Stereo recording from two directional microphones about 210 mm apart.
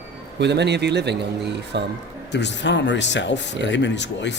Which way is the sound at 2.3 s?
55° left (ahead or behind).